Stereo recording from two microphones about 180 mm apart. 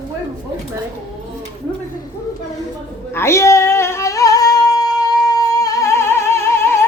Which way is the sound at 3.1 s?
15° left (ahead or behind).